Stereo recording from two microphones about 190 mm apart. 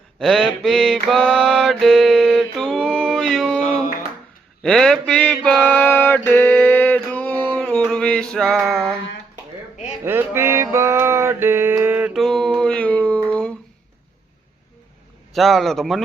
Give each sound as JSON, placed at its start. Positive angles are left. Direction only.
{"t": 0.2, "sound": "mantra", "side_deg": 0}
{"t": 4.6, "sound": "mantra", "side_deg": 5}
{"t": 10.0, "sound": "music", "side_deg": -10}
{"t": 13.3, "sound": "a sound", "side_deg": 5}
{"t": 15.3, "sound": "a man's voice", "side_deg": 0}